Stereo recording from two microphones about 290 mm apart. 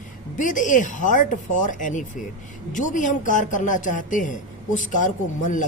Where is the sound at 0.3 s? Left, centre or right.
Left.